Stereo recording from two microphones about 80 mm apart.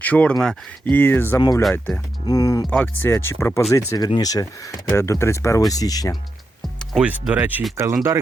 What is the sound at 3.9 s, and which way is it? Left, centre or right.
Speech, left.